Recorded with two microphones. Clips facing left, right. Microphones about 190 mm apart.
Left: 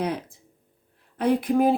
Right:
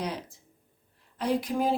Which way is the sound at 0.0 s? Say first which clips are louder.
Left 6 dB; 55° left (ahead or behind).